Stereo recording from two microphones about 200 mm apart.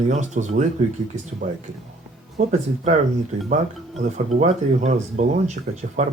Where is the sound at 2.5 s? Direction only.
35° right (ahead or behind).